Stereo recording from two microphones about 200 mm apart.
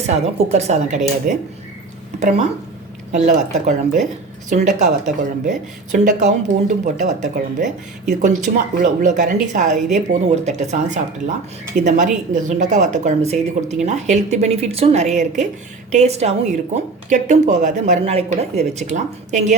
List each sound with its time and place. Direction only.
0.0 s speech: 35° right (ahead or behind)
3.1 s speech: 35° right (ahead or behind)